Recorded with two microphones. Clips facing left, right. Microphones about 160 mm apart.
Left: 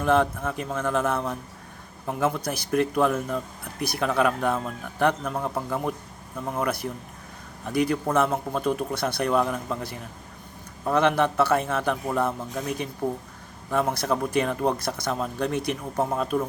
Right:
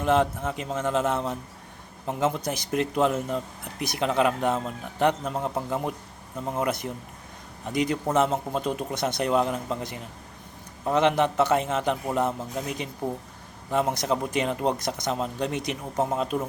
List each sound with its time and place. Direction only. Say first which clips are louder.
0.0 s speech: left 1 dB; 20° right (ahead or behind)